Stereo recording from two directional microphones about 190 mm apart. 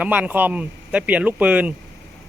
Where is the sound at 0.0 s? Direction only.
5° right (ahead or behind).